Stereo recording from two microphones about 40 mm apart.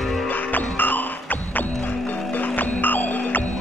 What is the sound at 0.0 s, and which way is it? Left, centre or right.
Music, centre.